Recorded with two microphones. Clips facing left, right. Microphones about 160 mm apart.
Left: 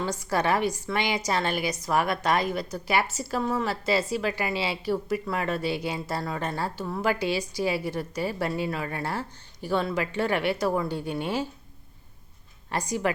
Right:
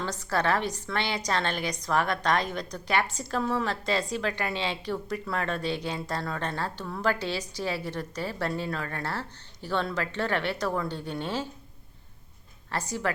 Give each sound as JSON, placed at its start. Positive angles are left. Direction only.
{"t": 0.0, "sound": "a woman's voice", "side_deg": 10}
{"t": 12.7, "sound": "a woman's voice", "side_deg": 15}